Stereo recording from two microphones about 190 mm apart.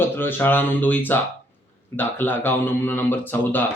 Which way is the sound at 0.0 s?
10° left (ahead or behind).